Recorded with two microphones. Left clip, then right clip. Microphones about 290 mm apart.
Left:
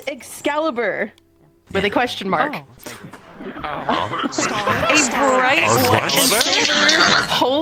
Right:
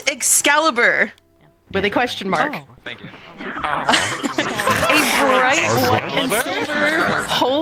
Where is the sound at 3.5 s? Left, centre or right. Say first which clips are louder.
Right 5 dB; centre.